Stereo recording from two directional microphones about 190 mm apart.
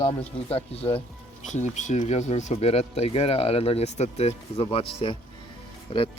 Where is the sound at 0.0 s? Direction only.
30° left (ahead or behind).